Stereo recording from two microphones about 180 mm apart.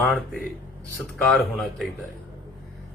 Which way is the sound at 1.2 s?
Centre (ahead or behind).